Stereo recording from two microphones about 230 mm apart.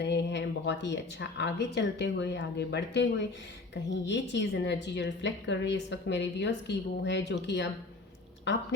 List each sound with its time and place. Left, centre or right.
0.0 s a woman's voice: left